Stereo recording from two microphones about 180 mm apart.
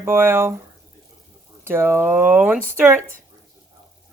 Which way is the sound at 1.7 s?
15° right (ahead or behind).